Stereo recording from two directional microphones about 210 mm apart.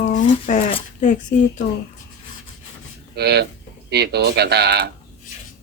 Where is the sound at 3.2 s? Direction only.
50° right (ahead or behind).